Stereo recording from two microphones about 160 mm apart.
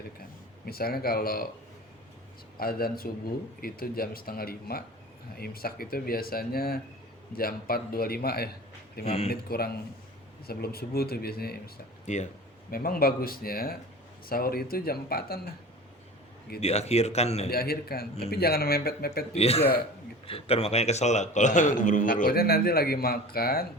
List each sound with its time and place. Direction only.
0.6 s speech: 70° left (ahead or behind)
2.6 s speech: 70° left (ahead or behind)
9.0 s speech: 40° left (ahead or behind)
9.3 s speech: 75° left (ahead or behind)
12.0 s a man's voice: 50° left (ahead or behind)
12.7 s speech: 65° left (ahead or behind)
16.6 s speech: 40° left (ahead or behind)
17.5 s speech: 75° left (ahead or behind)
19.3 s a man's voice: 40° left (ahead or behind); by 23.6 s 70° left (ahead or behind)